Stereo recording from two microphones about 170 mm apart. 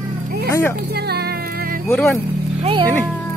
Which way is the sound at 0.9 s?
70° right (ahead or behind).